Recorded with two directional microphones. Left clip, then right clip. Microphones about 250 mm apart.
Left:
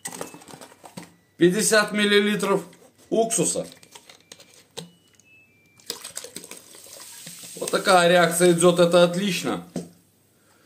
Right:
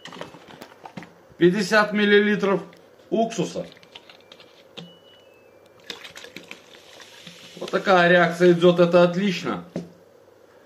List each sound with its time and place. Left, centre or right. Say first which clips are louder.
1.4 s speech: right 1 dB; left
5.9 s a sound: left 1 dB; centre
7.7 s speech: even; left